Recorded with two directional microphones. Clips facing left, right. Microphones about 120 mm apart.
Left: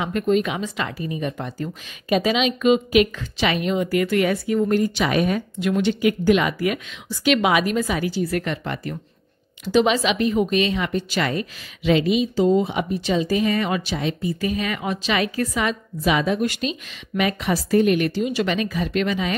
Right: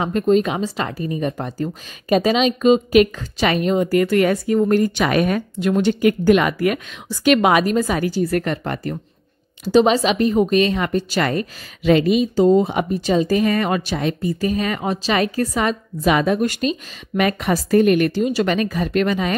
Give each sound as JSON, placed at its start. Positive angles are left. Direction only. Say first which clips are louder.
{"t": 0.0, "sound": "speech", "louder": "right 4 dB", "side_deg": -35}
{"t": 5.6, "sound": "speech", "louder": "right 4 dB", "side_deg": -40}